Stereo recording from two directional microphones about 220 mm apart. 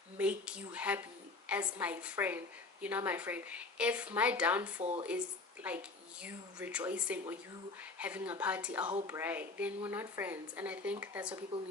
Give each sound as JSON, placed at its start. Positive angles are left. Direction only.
{"t": 0.2, "sound": "a woman's voice", "side_deg": -5}
{"t": 4.8, "sound": "speech", "side_deg": -30}
{"t": 6.2, "sound": "a woman's voice", "side_deg": -5}